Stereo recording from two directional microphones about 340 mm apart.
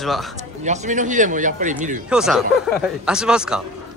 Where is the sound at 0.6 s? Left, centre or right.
Right.